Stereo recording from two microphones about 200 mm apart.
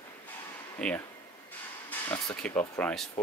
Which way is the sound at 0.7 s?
5° left (ahead or behind).